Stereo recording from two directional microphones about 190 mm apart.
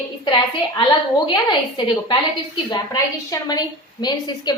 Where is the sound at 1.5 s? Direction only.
25° left (ahead or behind).